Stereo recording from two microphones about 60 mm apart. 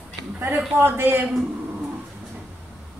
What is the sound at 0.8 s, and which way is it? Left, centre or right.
Speech, right.